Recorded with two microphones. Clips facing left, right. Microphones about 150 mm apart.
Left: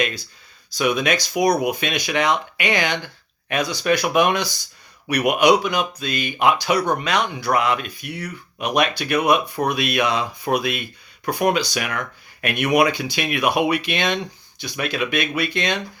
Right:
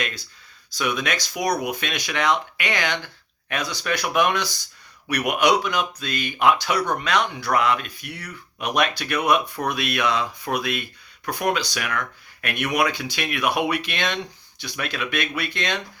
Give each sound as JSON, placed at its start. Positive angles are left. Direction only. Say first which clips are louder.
{"t": 0.8, "sound": "speech", "louder": "left 5 dB", "side_deg": 10}
{"t": 3.8, "sound": "speech", "louder": "left 4 dB", "side_deg": 15}
{"t": 12.9, "sound": "speech", "louder": "left 4 dB", "side_deg": 5}